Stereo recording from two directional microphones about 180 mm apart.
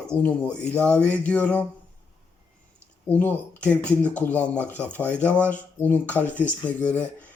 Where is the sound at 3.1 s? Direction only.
10° left (ahead or behind).